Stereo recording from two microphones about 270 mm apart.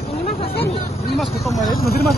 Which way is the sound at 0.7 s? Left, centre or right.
Left.